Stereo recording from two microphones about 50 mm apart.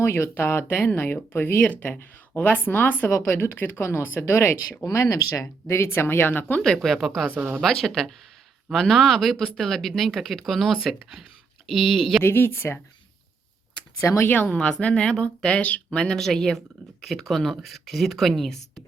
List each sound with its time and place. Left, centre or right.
0.0 s a woman's voice: left
1.7 s speech: left
3.1 s a woman's voice: left
4.9 s speech: left
6.6 s speech: centre
7.3 s a woman's voice: right
7.6 s speech: centre
12.2 s speech: left
14.0 s speech: left
14.4 s a woman's voice: left; by 18.6 s centre